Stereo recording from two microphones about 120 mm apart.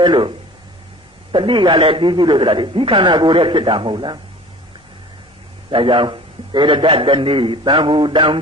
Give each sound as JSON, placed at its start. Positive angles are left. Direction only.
{"t": 0.0, "sound": "speech", "side_deg": -40}
{"t": 1.3, "sound": "a man's voice", "side_deg": -45}
{"t": 5.7, "sound": "a man's voice", "side_deg": -45}